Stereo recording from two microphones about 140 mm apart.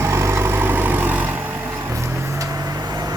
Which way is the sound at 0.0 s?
20° right (ahead or behind).